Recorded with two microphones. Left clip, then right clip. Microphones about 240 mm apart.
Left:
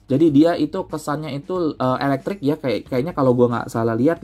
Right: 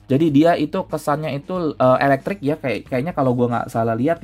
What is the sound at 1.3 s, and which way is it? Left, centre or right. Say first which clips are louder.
Speech: even; right.